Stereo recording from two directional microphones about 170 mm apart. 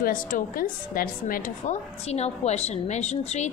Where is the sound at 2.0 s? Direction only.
40° left (ahead or behind).